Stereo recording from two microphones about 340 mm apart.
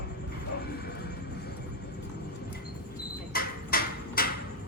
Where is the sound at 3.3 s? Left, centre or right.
Left.